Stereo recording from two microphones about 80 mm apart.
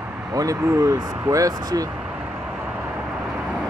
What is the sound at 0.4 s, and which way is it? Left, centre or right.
Speech, right.